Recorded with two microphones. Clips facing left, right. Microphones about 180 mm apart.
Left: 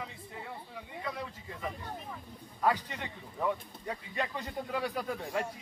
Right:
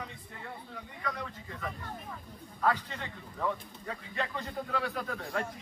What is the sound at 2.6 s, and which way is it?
Speech, 15° left (ahead or behind).